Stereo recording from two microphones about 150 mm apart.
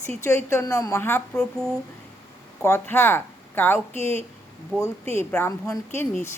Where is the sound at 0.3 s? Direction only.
20° left (ahead or behind).